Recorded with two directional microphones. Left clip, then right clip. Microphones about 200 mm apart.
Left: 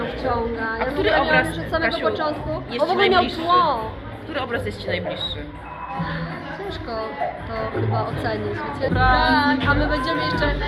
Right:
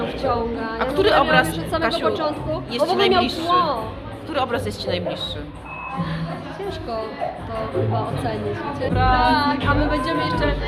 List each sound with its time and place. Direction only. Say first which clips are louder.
0.2 s a woman's voice: right 1 dB; 10° right (ahead or behind)
0.8 s a woman's voice: right 3 dB; 20° right (ahead or behind)
3.5 s a capella: left 2 dB; 5° right (ahead or behind)
4.4 s a woman's voice: right 3 dB; 15° right (ahead or behind)
8.8 s a capella: left 1 dB; 5° right (ahead or behind)
9.2 s music: even; 10° left (ahead or behind)
9.6 s a woman's voice: even; 5° right (ahead or behind)